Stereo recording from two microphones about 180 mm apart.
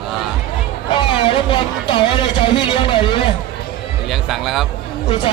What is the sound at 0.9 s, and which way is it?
Music, 30° left (ahead or behind).